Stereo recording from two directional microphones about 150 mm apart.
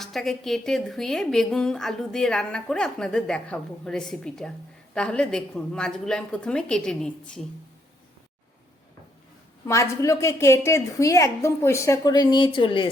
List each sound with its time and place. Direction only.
0.0 s a woman's voice: centre (ahead or behind)
9.6 s a woman's voice: 20° left (ahead or behind)